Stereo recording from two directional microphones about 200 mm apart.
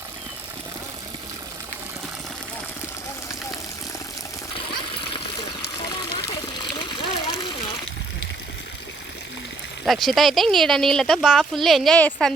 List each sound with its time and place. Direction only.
4.5 s water: 25° left (ahead or behind)
9.8 s speech: centre (ahead or behind)